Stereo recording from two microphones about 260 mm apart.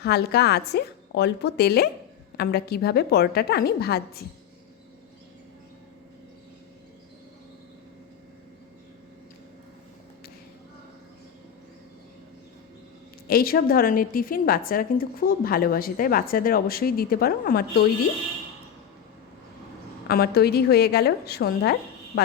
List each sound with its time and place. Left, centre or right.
0.0 s a woman's voice: left
13.2 s a woman's voice: left
20.1 s a woman's voice: left